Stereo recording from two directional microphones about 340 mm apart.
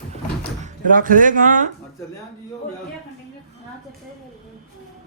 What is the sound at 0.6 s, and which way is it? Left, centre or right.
Speech, right.